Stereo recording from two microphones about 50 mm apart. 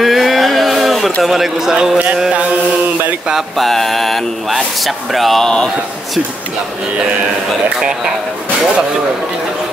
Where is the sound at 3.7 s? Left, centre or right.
Centre.